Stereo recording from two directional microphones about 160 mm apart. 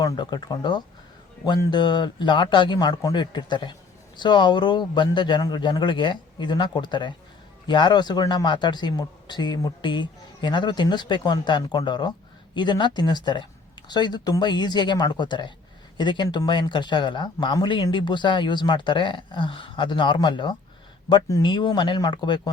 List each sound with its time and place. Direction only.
0.0 s speech: 25° left (ahead or behind)